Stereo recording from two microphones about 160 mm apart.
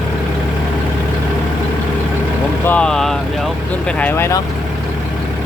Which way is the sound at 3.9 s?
10° left (ahead or behind).